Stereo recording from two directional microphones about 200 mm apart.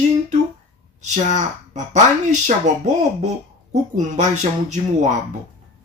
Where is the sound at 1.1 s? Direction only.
35° right (ahead or behind).